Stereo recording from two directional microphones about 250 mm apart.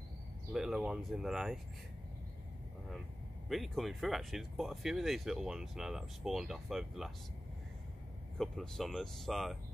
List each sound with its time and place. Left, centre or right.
0.5 s speech: centre
3.4 s speech: centre
8.4 s speech: centre